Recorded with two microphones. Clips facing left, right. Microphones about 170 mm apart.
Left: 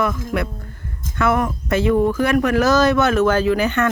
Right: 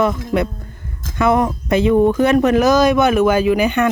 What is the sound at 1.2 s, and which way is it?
Speech, 20° right (ahead or behind).